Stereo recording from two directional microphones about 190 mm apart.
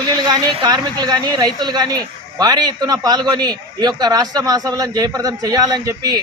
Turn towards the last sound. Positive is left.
turn(degrees=-20)  # may be behind; listen again after turning